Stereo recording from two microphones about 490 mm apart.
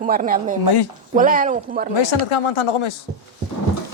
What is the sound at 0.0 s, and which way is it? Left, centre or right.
Speech, centre.